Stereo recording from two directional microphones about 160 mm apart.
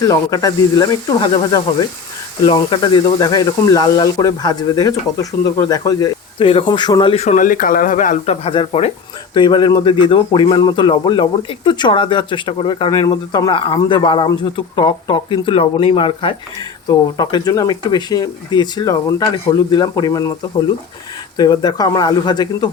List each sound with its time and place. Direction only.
0.0 s speech: 20° left (ahead or behind)
6.4 s speech: 35° left (ahead or behind); by 8.4 s 50° left (ahead or behind)
8.4 s speech: 35° left (ahead or behind)
21.3 s speech: 25° left (ahead or behind)